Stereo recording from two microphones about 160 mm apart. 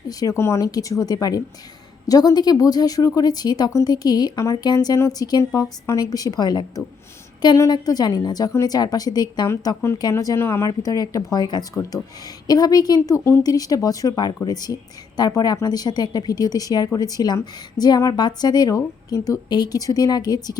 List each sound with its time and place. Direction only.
0.1 s a woman's voice: 20° left (ahead or behind)